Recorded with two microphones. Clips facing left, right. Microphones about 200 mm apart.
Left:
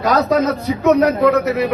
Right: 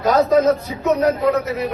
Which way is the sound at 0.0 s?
75° left (ahead or behind).